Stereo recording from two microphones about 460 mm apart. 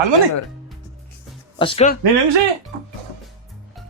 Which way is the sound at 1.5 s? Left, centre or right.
Centre.